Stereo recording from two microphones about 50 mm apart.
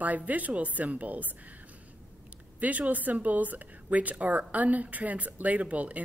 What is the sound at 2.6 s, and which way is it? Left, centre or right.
A woman's voice, right.